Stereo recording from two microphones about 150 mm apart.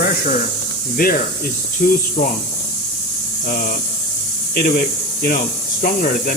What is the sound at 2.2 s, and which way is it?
Speech, 55° left (ahead or behind).